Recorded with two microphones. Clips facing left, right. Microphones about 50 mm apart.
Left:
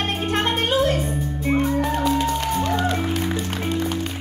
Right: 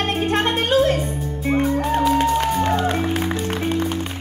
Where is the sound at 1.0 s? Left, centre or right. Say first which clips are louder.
Even; centre.